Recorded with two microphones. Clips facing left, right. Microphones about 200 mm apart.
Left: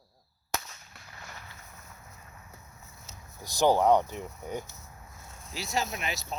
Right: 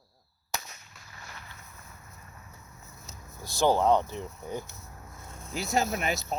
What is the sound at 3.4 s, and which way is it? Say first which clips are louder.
Speech: left 1 dB; 15° left (ahead or behind).